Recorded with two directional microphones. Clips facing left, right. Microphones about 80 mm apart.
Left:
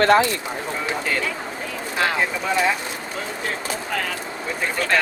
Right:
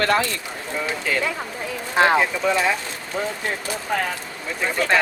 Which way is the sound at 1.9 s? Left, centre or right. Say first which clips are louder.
Right 6 dB; right.